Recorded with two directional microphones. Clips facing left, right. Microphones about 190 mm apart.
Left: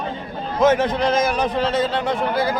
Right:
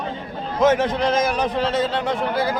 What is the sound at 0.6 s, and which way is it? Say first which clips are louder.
A man's voice: left 1 dB; 50° left (ahead or behind).